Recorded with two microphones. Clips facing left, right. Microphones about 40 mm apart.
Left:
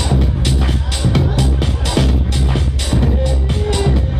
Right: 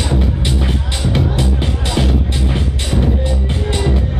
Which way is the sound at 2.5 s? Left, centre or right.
Centre.